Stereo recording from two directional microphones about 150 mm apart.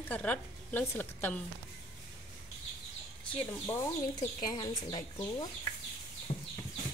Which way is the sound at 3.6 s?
20° left (ahead or behind).